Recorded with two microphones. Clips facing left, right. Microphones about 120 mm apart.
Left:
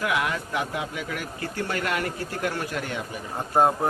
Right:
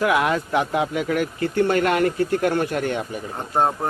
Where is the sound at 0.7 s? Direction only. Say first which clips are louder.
Right 9 dB; 70° right (ahead or behind).